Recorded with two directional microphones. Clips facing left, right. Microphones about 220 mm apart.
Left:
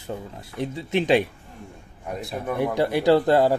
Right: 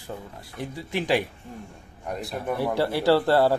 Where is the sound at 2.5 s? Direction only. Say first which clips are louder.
Left 2 dB; 20° left (ahead or behind).